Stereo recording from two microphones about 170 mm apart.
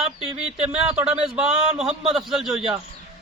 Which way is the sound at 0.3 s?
5° right (ahead or behind).